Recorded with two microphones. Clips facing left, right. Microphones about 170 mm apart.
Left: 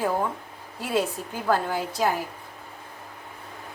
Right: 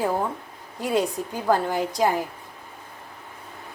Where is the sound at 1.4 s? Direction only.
15° right (ahead or behind).